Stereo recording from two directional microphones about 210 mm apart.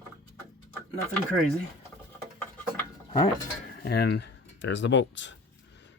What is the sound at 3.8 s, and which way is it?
Speech, 50° left (ahead or behind).